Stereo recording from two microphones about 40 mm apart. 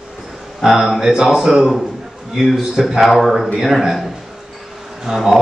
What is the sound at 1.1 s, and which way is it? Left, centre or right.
A man's voice, centre.